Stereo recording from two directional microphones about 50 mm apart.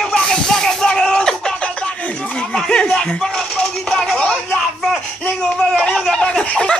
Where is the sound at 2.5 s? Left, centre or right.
Centre.